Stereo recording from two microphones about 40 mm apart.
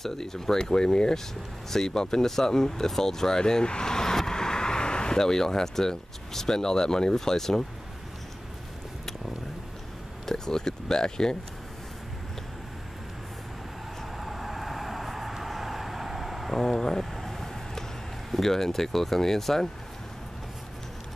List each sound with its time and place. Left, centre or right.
0.0 s speech: centre
10.2 s speech: centre
14.1 s vehicle: centre
18.3 s speech: centre